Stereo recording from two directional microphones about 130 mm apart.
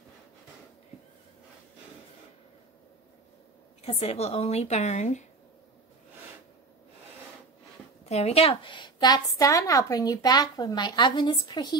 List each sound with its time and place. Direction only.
3.8 s a woman's voice: 55° left (ahead or behind)
8.0 s a woman's voice: 55° left (ahead or behind); by 11.8 s 35° left (ahead or behind)